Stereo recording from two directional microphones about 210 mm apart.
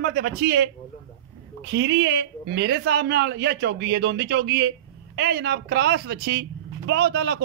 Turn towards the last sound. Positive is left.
turn(degrees=-50)  # may be behind; listen again after turning